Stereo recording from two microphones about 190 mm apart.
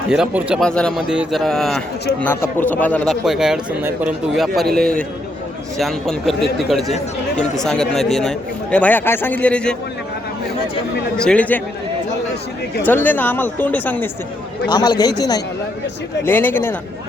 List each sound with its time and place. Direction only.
0.1 s a man's voice: 5° right (ahead or behind)
11.2 s speech: 5° left (ahead or behind)
12.8 s speech: 10° left (ahead or behind)
14.7 s speech: 20° left (ahead or behind)